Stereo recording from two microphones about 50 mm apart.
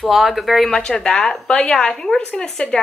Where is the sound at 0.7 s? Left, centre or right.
Centre.